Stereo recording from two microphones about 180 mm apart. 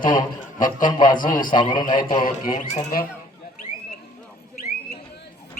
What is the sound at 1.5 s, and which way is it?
Speech, 25° left (ahead or behind).